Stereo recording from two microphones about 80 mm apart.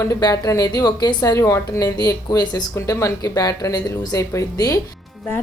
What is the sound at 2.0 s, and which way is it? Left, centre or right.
Speech, left.